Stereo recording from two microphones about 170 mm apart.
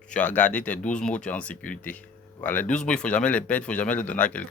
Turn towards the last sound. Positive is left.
turn(degrees=10)  # may be behind; listen again after turning